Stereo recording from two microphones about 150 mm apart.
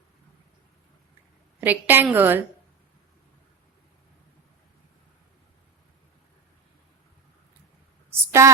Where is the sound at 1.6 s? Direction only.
10° right (ahead or behind).